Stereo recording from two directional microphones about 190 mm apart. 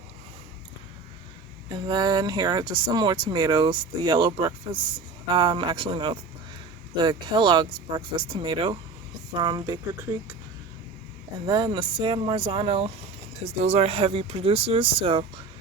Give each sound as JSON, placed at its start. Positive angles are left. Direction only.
{"t": 1.9, "sound": "speech", "side_deg": -20}
{"t": 11.4, "sound": "speech", "side_deg": -20}